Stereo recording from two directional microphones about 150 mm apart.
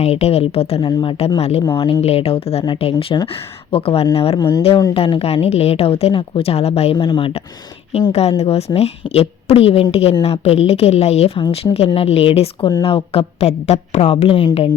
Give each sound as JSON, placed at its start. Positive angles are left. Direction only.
{"t": 0.0, "sound": "a woman's voice", "side_deg": 45}
{"t": 0.8, "sound": "speech", "side_deg": 30}
{"t": 1.4, "sound": "a woman's voice", "side_deg": 45}
{"t": 1.6, "sound": "a woman's voice", "side_deg": 30}
{"t": 4.4, "sound": "speech", "side_deg": 25}
{"t": 4.9, "sound": "a woman's voice", "side_deg": 40}
{"t": 6.9, "sound": "a woman's voice", "side_deg": 30}